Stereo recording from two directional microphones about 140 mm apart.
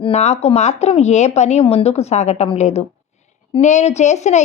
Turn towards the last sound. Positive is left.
turn(degrees=55)  # may be behind; listen again after turning